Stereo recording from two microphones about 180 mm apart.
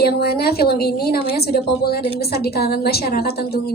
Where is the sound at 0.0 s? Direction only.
60° left (ahead or behind).